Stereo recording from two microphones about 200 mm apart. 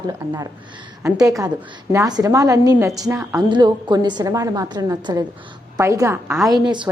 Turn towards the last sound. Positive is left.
turn(degrees=-20)  # may be behind; listen again after turning